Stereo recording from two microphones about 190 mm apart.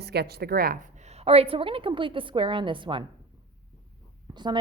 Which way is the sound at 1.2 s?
30° right (ahead or behind).